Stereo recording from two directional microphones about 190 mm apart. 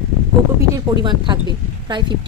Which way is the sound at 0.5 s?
20° right (ahead or behind).